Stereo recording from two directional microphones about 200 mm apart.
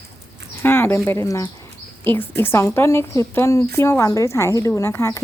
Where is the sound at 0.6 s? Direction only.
10° left (ahead or behind).